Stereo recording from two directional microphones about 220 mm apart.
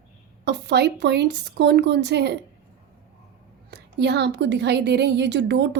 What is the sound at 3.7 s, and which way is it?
A woman's voice, 50° right (ahead or behind).